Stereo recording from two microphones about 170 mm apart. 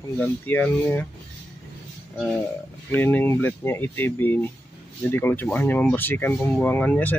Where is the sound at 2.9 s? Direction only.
10° left (ahead or behind).